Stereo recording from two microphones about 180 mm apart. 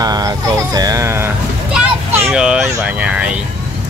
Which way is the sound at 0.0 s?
20° right (ahead or behind).